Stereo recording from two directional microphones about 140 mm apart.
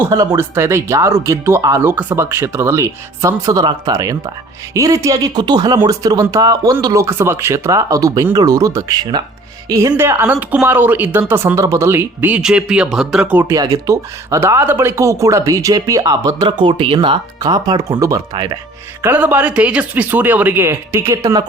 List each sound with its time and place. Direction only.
0.0 s speech: 25° right (ahead or behind)
16.5 s speech: 35° right (ahead or behind)
19.0 s speech: 15° right (ahead or behind)